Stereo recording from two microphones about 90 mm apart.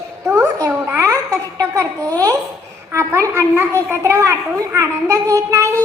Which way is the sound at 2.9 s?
30° right (ahead or behind).